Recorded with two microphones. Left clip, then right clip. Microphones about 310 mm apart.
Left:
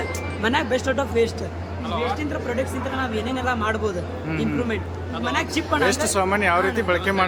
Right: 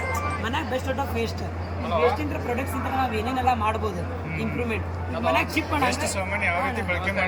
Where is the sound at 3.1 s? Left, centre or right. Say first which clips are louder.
Right 1 dB; centre.